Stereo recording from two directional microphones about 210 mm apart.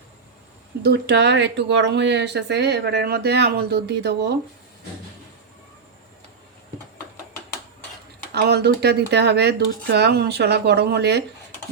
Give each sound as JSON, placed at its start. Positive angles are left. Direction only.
{"t": 0.9, "sound": "speech", "side_deg": -50}
{"t": 8.4, "sound": "speech", "side_deg": -50}